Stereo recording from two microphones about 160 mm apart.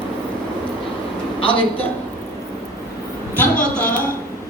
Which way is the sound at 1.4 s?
35° left (ahead or behind).